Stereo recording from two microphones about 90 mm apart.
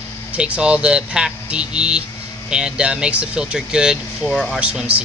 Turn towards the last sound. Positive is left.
turn(degrees=-10)  # may be behind; listen again after turning